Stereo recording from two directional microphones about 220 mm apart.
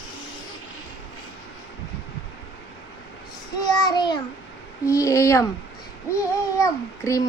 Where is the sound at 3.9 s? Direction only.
20° left (ahead or behind).